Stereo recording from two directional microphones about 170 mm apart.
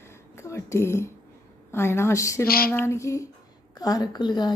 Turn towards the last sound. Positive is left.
turn(degrees=25)  # may be behind; listen again after turning